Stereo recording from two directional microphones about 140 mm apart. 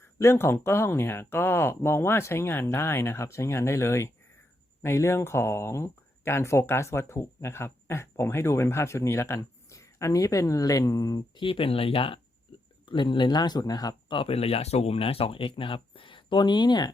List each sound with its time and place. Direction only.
0.0 s speech: 20° left (ahead or behind)
11.3 s speech: 40° left (ahead or behind)